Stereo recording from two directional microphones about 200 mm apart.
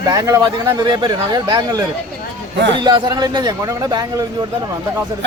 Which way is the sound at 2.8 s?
20° right (ahead or behind).